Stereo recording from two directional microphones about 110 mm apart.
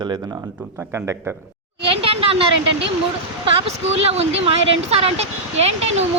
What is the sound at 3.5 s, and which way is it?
Speech, 70° right (ahead or behind).